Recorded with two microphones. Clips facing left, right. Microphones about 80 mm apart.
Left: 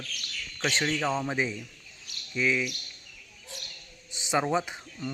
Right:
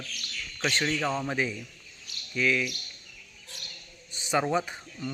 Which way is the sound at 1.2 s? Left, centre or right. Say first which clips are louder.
Even; centre.